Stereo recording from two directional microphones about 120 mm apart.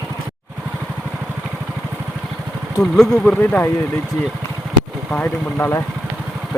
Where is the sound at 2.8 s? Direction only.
5° left (ahead or behind).